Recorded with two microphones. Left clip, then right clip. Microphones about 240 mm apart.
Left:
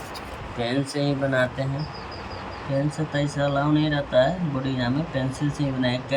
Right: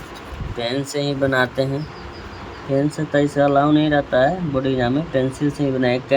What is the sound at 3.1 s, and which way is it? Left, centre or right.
Speech, centre.